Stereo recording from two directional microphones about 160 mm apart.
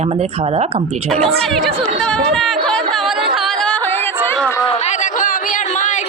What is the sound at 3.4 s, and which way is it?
Music, centre (ahead or behind).